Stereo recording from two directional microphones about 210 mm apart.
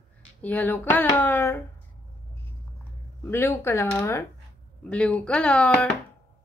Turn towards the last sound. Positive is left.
turn(degrees=5)  # may be behind; listen again after turning